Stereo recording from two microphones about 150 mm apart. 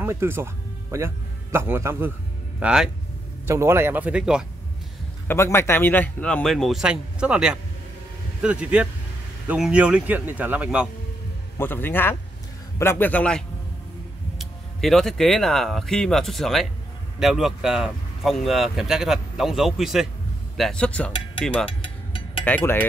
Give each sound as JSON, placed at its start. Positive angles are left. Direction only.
{"t": 0.0, "sound": "a man's voice", "side_deg": -15}
{"t": 2.6, "sound": "speech", "side_deg": -5}
{"t": 3.4, "sound": "speech", "side_deg": -15}
{"t": 5.3, "sound": "speech", "side_deg": 15}
{"t": 11.5, "sound": "speech", "side_deg": 15}
{"t": 14.4, "sound": "speech", "side_deg": 0}